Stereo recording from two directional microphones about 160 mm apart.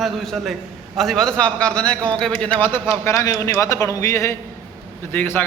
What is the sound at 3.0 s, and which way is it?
A man's voice, 20° left (ahead or behind).